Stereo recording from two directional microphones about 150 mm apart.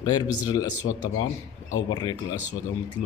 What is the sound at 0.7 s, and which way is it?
Speech, 60° left (ahead or behind).